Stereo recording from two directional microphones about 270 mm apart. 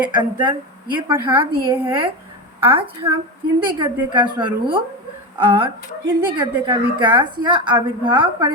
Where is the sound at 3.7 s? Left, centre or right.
Centre.